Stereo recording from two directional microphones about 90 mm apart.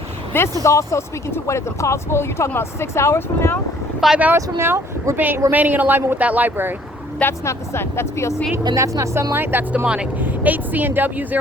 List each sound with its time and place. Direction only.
0.3 s speech: 30° left (ahead or behind)
4.0 s speech: 5° right (ahead or behind)
4.4 s speech: 30° right (ahead or behind)
7.2 s speech: 30° left (ahead or behind)
8.7 s a woman's voice: 40° right (ahead or behind)
9.3 s speech: 25° right (ahead or behind)